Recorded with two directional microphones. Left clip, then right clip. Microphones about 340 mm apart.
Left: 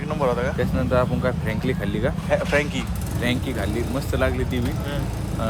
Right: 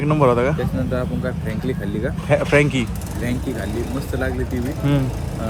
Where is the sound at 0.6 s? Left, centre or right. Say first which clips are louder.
Left 2 dB; centre.